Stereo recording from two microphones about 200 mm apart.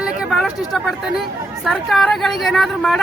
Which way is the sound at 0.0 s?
Centre (ahead or behind).